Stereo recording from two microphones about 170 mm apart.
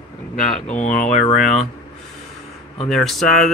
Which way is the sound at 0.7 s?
45° left (ahead or behind).